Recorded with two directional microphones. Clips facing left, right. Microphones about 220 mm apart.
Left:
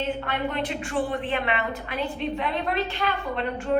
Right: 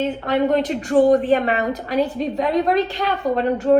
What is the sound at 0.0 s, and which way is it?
A woman's voice, 40° right (ahead or behind).